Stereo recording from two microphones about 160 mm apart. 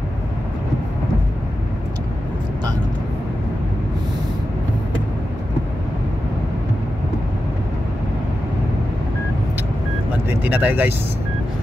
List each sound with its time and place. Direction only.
10.2 s vehicle: 10° right (ahead or behind)